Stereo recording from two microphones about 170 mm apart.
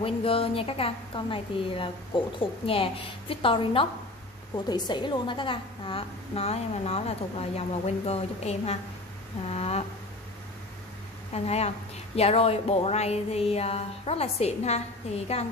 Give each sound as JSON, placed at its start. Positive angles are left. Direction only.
{"t": 0.0, "sound": "a woman's voice", "side_deg": 35}
{"t": 11.3, "sound": "a woman's voice", "side_deg": 40}